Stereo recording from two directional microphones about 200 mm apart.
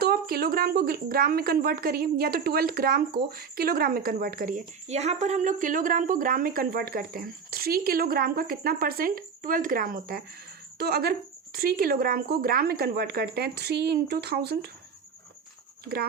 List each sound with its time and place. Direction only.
0.0 s speech: 50° right (ahead or behind)
15.8 s speech: 50° right (ahead or behind)